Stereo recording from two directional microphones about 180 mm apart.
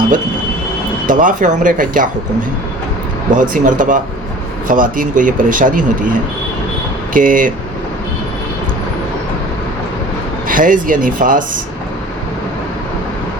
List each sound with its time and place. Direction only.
1.0 s speech: 45° right (ahead or behind)
3.3 s speech: 45° right (ahead or behind)
7.1 s speech: 50° right (ahead or behind)
10.5 s speech: 50° right (ahead or behind)